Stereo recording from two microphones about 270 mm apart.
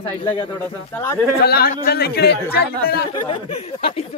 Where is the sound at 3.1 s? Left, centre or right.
Centre.